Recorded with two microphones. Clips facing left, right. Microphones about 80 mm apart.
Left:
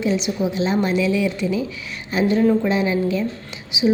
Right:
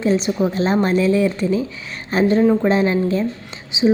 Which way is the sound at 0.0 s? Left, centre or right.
Right.